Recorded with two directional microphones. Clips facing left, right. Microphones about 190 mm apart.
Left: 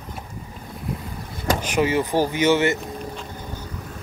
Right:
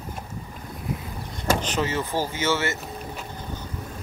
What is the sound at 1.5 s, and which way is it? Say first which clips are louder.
Speech: left 3 dB; 10° left (ahead or behind).